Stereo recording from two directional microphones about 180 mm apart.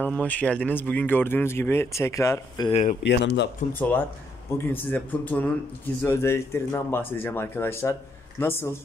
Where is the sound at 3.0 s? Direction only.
75° left (ahead or behind).